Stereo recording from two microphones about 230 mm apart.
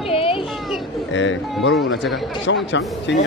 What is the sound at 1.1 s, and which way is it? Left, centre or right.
A man's voice, left.